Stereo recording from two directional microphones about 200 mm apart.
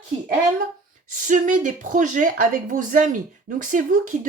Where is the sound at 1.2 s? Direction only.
40° right (ahead or behind).